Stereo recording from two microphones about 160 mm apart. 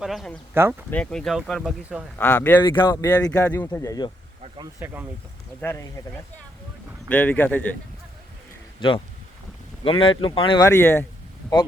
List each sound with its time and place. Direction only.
0.0 s speech: centre (ahead or behind)
0.5 s speech: 10° right (ahead or behind)
0.9 s speech: 5° left (ahead or behind)
2.1 s speech: 10° left (ahead or behind)
3.4 s speech: 10° left (ahead or behind)
4.8 s speech: 10° right (ahead or behind)
5.5 s speech: 15° left (ahead or behind)
7.1 s speech: 10° left (ahead or behind)
9.8 s speech: 35° left (ahead or behind)
10.6 s speech: 15° left (ahead or behind)